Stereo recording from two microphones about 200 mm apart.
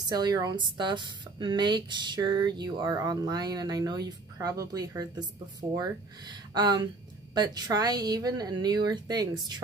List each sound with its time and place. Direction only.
0.1 s speech: 20° right (ahead or behind)